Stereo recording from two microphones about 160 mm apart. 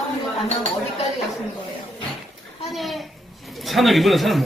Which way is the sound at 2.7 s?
Centre (ahead or behind).